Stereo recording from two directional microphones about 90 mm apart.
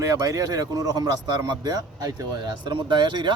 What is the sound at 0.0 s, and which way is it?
Speech, 35° right (ahead or behind).